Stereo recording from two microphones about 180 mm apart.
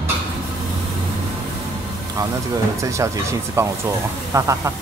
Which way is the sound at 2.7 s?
15° right (ahead or behind).